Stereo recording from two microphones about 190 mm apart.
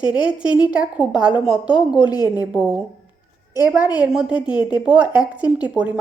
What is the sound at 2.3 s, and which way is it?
Speech, 10° right (ahead or behind).